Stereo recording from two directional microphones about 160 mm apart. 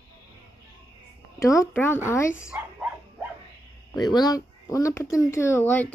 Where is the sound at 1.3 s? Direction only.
20° left (ahead or behind).